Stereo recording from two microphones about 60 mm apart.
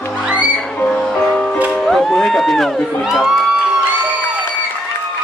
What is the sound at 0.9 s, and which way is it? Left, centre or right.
Music, centre.